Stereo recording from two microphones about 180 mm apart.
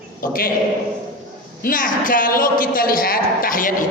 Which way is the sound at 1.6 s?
50° left (ahead or behind).